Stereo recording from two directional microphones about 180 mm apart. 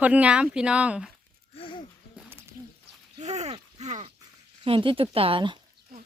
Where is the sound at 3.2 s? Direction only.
40° right (ahead or behind).